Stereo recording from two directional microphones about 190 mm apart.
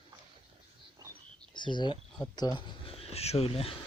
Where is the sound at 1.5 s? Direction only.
25° left (ahead or behind).